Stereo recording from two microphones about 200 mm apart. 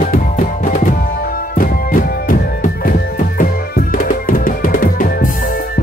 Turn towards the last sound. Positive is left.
turn(degrees=45)  # may be behind; listen again after turning